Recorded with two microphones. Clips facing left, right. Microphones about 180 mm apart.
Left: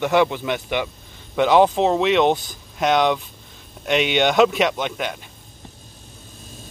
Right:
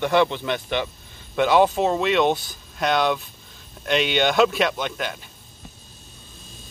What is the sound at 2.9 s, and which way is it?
Speech, 15° left (ahead or behind).